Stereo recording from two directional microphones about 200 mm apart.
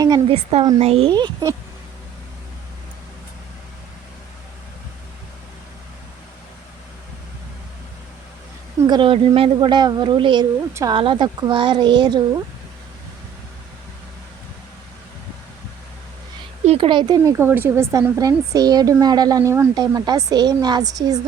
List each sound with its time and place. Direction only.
0.0 s a woman's voice: 20° right (ahead or behind)
8.9 s a woman's voice: 25° right (ahead or behind)
16.6 s a woman's voice: 30° right (ahead or behind)